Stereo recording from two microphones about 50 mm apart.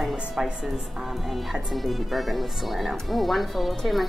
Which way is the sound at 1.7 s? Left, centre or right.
Centre.